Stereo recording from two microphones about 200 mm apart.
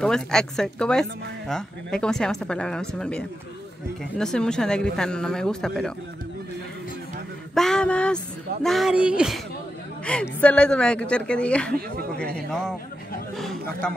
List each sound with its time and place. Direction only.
0.0 s a woman's voice: 5° left (ahead or behind)
7.5 s a woman's voice: 5° left (ahead or behind)